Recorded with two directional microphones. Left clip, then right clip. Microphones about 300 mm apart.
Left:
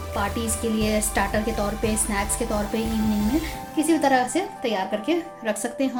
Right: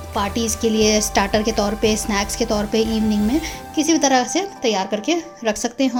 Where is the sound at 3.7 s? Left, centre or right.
Right.